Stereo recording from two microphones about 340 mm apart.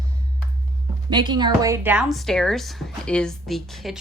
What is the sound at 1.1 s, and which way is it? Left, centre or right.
A woman's voice, centre.